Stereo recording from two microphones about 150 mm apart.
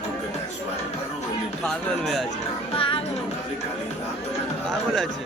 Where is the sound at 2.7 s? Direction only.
35° left (ahead or behind).